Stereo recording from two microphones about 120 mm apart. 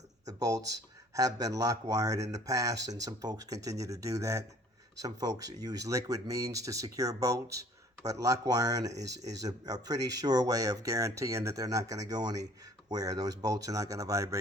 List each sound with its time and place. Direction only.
0.3 s speech: 30° right (ahead or behind)